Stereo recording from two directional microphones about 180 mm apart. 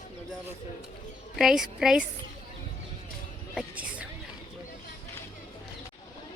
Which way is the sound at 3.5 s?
5° right (ahead or behind).